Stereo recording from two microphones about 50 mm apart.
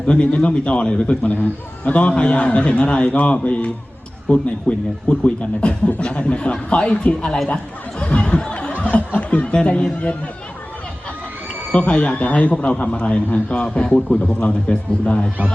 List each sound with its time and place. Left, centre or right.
0.1 s a man's voice: left
7.4 s chatter: centre
8.4 s music: left
8.8 s music: left
9.6 s a man's voice: left
11.7 s a man's voice: left